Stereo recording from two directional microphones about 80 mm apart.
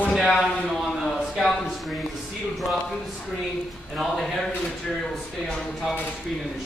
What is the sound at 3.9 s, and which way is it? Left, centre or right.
Speech, centre.